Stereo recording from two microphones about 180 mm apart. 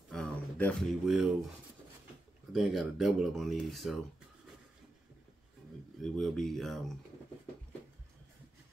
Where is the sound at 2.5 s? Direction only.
Centre (ahead or behind).